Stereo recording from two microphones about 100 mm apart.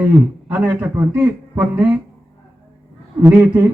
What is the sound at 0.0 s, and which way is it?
A man's voice, 20° right (ahead or behind).